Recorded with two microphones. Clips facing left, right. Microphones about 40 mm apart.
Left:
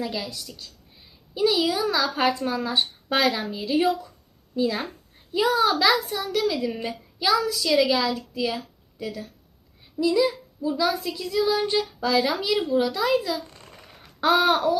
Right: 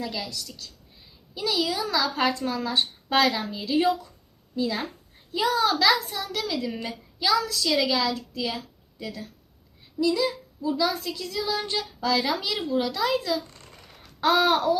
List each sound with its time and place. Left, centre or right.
0.0 s a woman's voice: centre
12.7 s a sound: centre
14.3 s speech: centre